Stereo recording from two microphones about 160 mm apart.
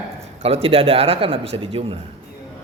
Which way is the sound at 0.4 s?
40° right (ahead or behind).